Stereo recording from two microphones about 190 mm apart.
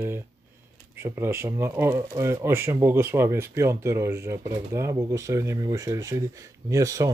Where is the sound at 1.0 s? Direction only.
10° right (ahead or behind).